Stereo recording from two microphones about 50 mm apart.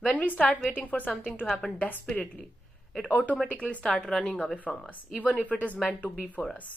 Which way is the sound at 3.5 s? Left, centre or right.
Left.